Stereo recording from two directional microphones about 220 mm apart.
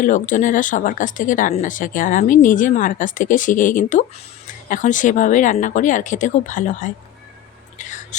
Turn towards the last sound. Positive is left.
turn(degrees=35)  # may be behind; listen again after turning